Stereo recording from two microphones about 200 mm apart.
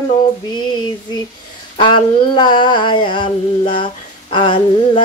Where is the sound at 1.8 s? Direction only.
25° left (ahead or behind).